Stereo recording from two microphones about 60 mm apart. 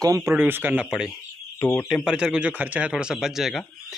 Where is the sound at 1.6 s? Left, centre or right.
Left.